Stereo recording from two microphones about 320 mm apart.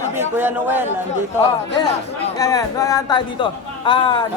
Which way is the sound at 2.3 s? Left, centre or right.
Centre.